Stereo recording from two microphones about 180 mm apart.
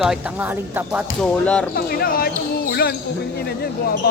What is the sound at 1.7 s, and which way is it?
Speech, 55° left (ahead or behind).